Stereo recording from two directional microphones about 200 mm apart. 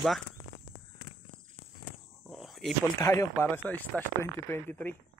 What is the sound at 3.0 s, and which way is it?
Speech, 15° left (ahead or behind).